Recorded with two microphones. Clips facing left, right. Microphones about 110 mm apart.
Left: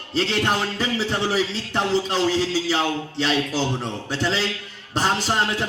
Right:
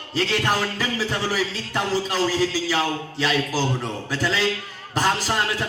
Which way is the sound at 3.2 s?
25° left (ahead or behind).